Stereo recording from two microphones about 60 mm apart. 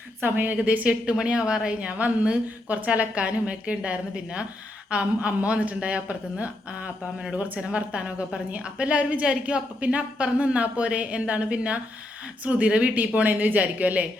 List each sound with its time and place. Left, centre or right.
0.2 s a woman's voice: right